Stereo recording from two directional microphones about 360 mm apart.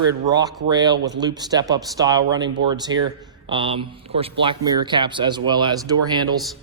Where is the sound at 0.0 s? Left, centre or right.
Centre.